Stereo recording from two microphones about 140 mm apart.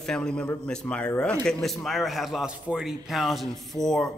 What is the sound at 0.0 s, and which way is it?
A man's voice, 5° left (ahead or behind).